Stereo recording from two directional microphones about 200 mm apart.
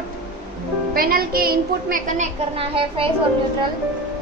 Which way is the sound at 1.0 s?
45° right (ahead or behind).